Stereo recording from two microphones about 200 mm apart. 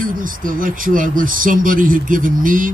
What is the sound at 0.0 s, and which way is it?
Speech, 45° right (ahead or behind).